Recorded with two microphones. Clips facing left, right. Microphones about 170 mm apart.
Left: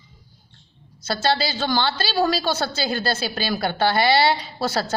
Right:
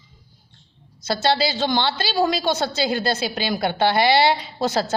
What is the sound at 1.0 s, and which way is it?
A woman's voice, 20° right (ahead or behind).